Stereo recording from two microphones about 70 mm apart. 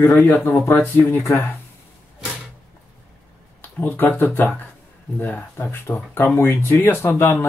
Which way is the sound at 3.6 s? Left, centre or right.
Left.